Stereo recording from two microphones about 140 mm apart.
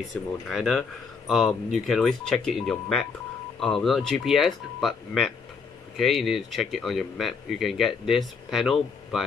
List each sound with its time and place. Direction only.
0.5 s speech: centre (ahead or behind)